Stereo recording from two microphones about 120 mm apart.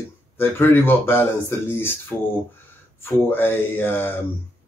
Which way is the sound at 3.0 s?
15° left (ahead or behind).